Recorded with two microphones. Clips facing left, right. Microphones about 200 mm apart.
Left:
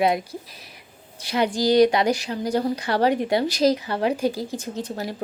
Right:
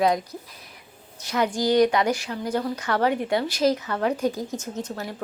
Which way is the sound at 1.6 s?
35° left (ahead or behind).